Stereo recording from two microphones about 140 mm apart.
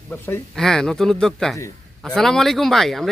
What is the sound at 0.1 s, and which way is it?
Speech, 15° left (ahead or behind).